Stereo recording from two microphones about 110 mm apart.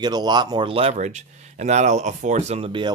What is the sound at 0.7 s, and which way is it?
Speech, 70° right (ahead or behind).